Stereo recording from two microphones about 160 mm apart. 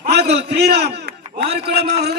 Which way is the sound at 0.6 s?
90° right.